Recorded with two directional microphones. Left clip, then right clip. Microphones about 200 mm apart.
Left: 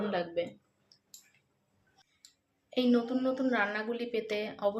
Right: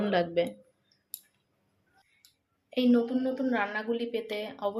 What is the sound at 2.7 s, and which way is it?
A woman's voice, centre (ahead or behind).